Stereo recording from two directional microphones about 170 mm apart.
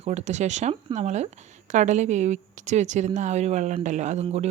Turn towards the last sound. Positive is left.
turn(degrees=-40)  # may be behind; listen again after turning